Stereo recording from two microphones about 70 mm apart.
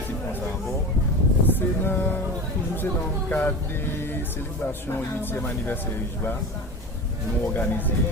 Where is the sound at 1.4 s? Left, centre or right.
Left.